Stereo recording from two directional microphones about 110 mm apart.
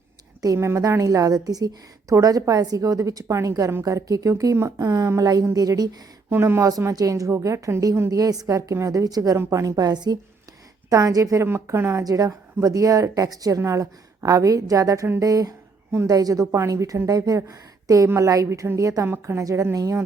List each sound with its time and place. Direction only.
0.4 s a woman's voice: 25° right (ahead or behind)
6.3 s a woman's voice: 20° right (ahead or behind)